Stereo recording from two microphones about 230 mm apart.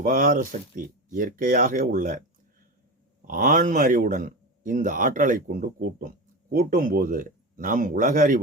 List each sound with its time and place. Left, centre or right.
0.0 s a man's voice: right
3.2 s a man's voice: right